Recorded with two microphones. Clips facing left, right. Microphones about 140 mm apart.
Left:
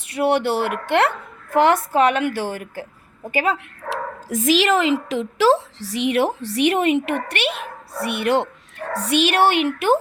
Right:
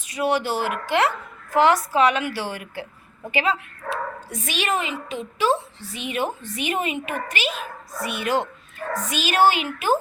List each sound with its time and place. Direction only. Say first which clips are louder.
0.0 s a woman's voice: left 4 dB; 60° left (ahead or behind)
3.8 s a woman's voice: left 2 dB; 90° left; by 10.0 s 65° left (ahead or behind)